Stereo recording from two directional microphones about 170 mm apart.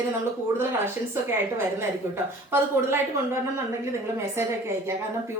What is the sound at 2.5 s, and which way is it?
Speech, 15° right (ahead or behind).